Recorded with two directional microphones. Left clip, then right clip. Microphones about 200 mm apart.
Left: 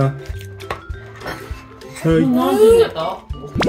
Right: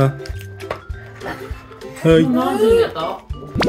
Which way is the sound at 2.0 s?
50° right (ahead or behind).